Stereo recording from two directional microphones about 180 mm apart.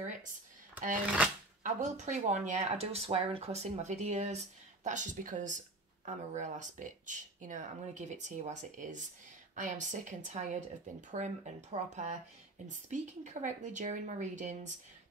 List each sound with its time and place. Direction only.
1.6 s speech: 45° right (ahead or behind)